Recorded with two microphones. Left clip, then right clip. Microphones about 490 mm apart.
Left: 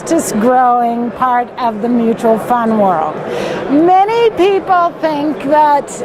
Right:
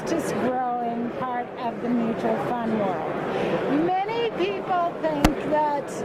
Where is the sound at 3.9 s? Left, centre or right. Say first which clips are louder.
Left 15 dB; left.